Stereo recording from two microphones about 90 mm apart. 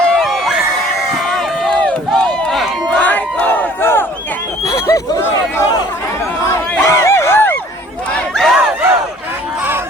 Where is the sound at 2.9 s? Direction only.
15° left (ahead or behind).